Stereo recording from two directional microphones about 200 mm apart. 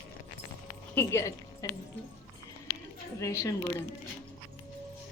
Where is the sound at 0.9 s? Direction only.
10° left (ahead or behind).